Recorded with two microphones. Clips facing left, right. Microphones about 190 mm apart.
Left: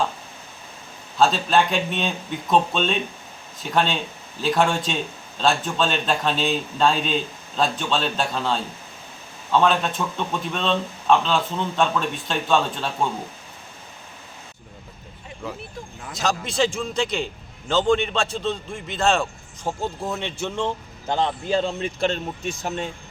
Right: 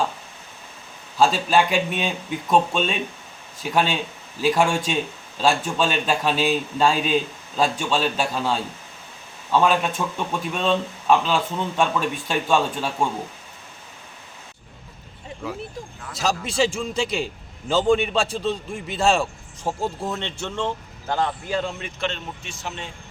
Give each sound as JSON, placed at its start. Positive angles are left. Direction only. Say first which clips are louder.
{"t": 1.2, "sound": "speech", "louder": "even", "side_deg": -10}
{"t": 16.2, "sound": "speech", "louder": "even", "side_deg": -5}
{"t": 20.1, "sound": "speech", "louder": "left 1 dB", "side_deg": 10}